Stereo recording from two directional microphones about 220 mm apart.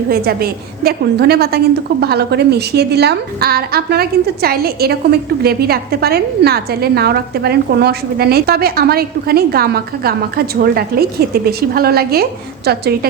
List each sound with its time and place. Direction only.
0.1 s a woman's voice: 45° right (ahead or behind)